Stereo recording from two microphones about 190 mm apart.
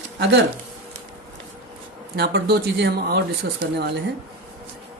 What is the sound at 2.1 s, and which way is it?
Speech, 55° right (ahead or behind).